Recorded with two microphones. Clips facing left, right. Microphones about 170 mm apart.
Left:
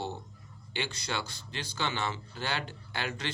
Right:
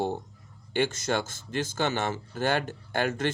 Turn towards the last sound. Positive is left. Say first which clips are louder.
# right 9 dB
turn(degrees=-50)  # may be behind; listen again after turning